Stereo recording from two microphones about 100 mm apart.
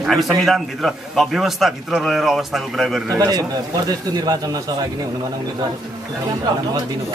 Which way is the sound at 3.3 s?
40° right (ahead or behind).